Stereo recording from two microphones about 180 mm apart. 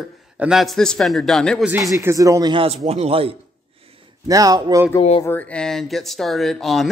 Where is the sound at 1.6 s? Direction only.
10° right (ahead or behind); by 3.3 s 30° right (ahead or behind).